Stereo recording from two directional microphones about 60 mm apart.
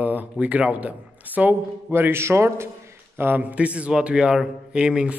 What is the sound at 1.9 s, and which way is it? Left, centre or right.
A man's voice, right.